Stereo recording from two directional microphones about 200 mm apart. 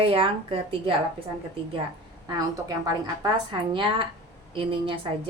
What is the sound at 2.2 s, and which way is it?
A woman's voice, 15° right (ahead or behind).